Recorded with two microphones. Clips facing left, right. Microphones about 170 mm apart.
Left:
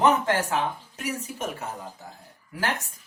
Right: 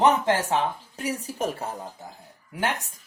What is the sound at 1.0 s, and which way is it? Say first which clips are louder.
Speech: right 4 dB; 35° right (ahead or behind).